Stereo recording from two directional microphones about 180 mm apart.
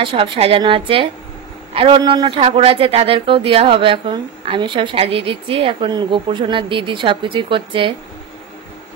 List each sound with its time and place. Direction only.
0.0 s speech: 30° right (ahead or behind)